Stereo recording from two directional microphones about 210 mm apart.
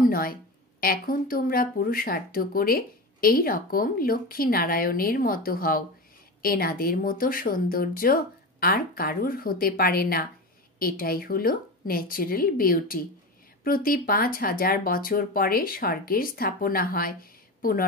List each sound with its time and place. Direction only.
0.0 s a woman's voice: 45° left (ahead or behind)